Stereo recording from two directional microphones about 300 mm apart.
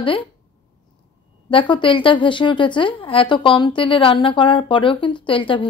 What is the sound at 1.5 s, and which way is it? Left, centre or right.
A woman's voice, centre.